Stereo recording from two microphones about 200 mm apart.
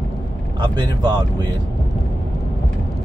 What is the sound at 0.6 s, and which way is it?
Speech, 20° right (ahead or behind).